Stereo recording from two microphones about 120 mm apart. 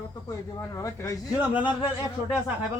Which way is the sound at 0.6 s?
25° left (ahead or behind).